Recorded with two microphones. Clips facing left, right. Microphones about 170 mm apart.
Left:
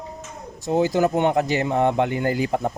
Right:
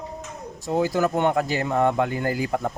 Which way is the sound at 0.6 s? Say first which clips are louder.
Left 3 dB; 25° left (ahead or behind).